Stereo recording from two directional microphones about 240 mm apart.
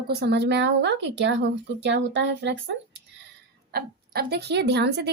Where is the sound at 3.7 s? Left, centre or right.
Right.